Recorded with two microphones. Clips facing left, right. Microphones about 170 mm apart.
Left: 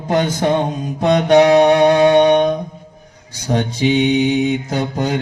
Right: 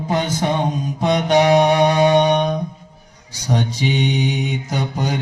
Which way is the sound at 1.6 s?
60° left (ahead or behind).